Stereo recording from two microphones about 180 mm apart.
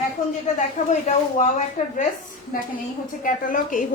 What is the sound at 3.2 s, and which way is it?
Speech, 50° left (ahead or behind).